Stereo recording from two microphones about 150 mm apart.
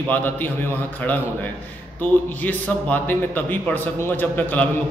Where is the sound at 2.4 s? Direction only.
10° left (ahead or behind).